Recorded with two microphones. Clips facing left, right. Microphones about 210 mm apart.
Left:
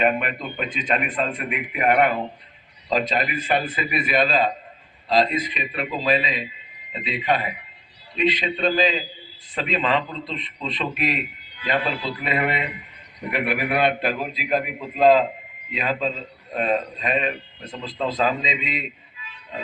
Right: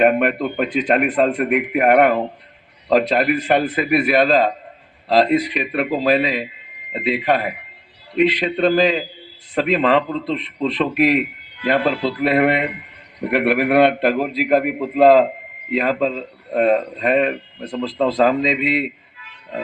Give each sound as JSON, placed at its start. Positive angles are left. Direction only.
{"t": 0.0, "sound": "a man's voice", "side_deg": -60}